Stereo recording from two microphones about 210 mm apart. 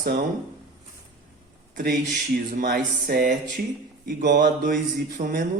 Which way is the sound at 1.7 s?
40° right (ahead or behind).